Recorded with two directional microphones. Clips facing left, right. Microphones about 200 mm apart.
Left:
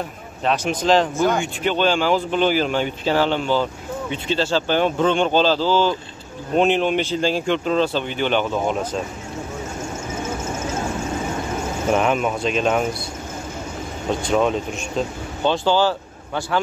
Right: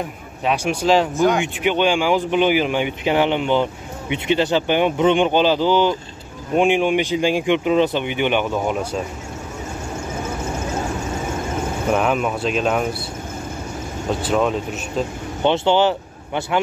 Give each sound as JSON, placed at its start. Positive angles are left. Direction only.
{"t": 0.5, "sound": "speech", "side_deg": -10}
{"t": 11.9, "sound": "speech", "side_deg": 0}
{"t": 14.2, "sound": "speech", "side_deg": 0}
{"t": 15.4, "sound": "speech", "side_deg": -20}